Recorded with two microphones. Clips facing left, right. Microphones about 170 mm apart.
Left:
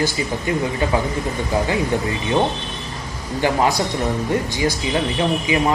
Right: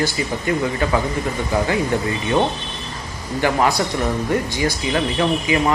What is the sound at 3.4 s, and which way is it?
Speech, 15° left (ahead or behind).